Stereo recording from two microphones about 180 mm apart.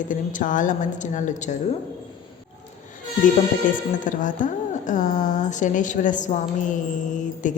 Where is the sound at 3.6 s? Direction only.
45° left (ahead or behind).